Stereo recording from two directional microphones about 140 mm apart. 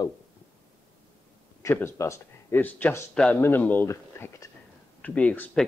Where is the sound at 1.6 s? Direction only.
20° left (ahead or behind).